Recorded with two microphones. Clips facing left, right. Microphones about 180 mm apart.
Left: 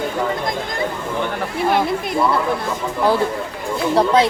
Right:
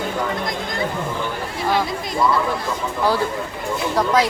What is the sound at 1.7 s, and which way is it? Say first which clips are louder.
Speech: left 2 dB; 60° left (ahead or behind).